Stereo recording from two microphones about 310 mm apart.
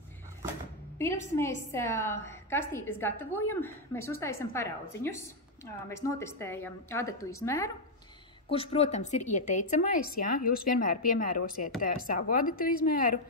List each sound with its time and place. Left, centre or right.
0.9 s a woman's voice: centre; by 13.2 s left